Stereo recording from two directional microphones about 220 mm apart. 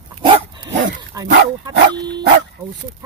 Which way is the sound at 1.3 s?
50° right (ahead or behind).